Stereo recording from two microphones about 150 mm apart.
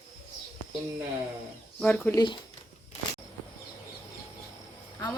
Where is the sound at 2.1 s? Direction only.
30° left (ahead or behind).